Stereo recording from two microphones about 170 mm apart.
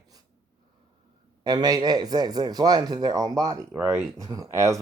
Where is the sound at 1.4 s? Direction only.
25° right (ahead or behind).